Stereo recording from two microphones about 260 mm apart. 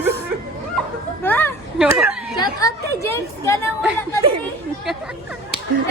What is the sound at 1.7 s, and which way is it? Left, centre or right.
Speech, centre.